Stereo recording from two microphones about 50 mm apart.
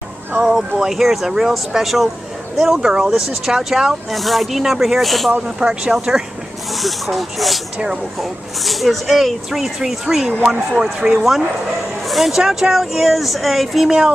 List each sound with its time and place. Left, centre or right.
0.4 s speech: centre
3.1 s speech: centre
5.6 s speech: centre
6.7 s speech: centre
7.7 s speech: centre
8.2 s speech: centre
13.8 s speech: centre